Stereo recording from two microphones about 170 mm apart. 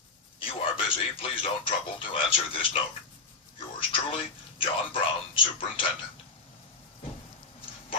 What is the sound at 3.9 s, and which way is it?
Speech, 35° left (ahead or behind).